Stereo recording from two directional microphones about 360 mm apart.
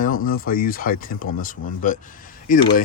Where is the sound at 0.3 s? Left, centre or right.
Left.